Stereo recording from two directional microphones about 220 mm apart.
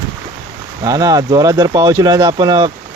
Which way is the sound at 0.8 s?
15° right (ahead or behind).